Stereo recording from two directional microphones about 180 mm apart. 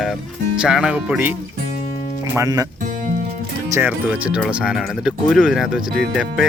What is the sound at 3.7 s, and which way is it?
Speech, 10° right (ahead or behind).